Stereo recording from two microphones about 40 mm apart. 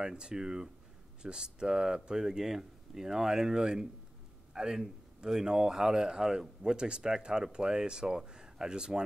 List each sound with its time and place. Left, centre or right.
0.0 s speech: centre